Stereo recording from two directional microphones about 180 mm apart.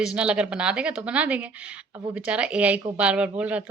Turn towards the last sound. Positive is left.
turn(degrees=-5)  # may be behind; listen again after turning